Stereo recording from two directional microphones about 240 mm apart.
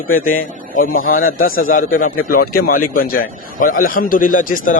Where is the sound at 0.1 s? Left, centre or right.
Left.